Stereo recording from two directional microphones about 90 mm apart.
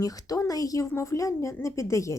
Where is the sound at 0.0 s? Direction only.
40° left (ahead or behind).